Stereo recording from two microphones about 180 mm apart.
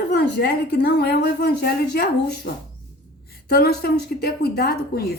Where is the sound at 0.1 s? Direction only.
65° left (ahead or behind).